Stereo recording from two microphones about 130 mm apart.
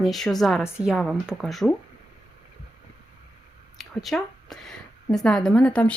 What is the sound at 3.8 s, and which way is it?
A woman's voice, centre (ahead or behind).